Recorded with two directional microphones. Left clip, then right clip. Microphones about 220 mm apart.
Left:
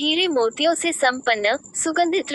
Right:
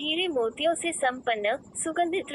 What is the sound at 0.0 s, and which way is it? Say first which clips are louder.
A woman's voice: left 7 dB; 35° left (ahead or behind).